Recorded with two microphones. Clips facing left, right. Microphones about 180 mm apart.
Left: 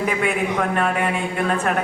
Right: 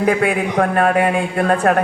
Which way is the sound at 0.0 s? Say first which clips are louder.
Right 5 dB; 45° right (ahead or behind).